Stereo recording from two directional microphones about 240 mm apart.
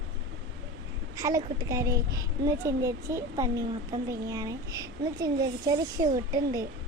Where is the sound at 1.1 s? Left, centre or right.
Centre.